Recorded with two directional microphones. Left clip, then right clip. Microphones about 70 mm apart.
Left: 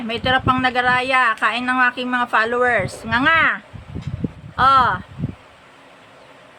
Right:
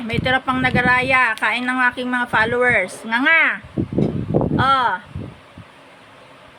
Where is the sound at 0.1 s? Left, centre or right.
Left.